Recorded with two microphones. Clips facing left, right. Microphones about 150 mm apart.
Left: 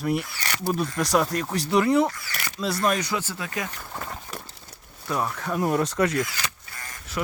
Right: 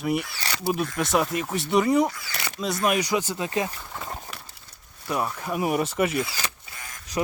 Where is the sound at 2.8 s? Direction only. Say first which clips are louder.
Right 2 dB; 10° right (ahead or behind).